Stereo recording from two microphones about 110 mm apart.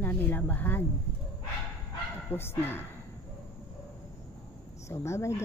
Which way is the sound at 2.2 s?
20° left (ahead or behind).